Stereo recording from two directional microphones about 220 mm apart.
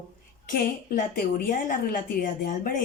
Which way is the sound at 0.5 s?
40° left (ahead or behind).